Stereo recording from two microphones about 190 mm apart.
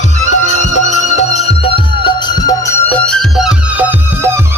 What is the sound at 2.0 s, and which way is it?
Music, 20° left (ahead or behind).